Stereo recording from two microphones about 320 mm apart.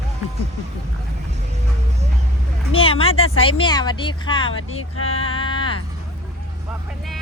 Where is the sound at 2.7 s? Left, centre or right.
Centre.